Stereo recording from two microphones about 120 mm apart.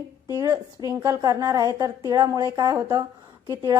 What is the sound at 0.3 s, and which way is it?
A woman's voice, 30° right (ahead or behind).